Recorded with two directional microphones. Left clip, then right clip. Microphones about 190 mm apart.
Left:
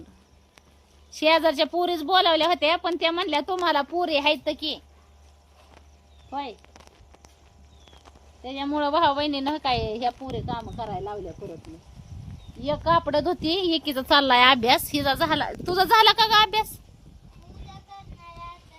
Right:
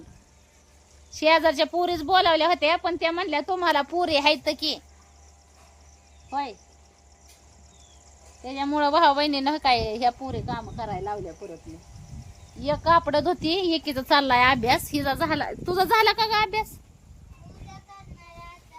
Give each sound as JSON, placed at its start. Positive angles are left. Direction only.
{"t": 1.1, "sound": "a woman's voice", "side_deg": 5}
{"t": 3.8, "sound": "a woman's voice", "side_deg": -20}
{"t": 6.3, "sound": "a woman's voice", "side_deg": -30}
{"t": 8.4, "sound": "a woman's voice", "side_deg": -30}
{"t": 12.6, "sound": "a woman's voice", "side_deg": -35}
{"t": 13.1, "sound": "speech", "side_deg": -15}
{"t": 13.5, "sound": "a woman's voice", "side_deg": 0}